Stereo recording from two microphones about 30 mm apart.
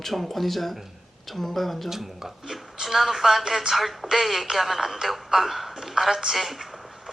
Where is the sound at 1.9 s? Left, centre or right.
Centre.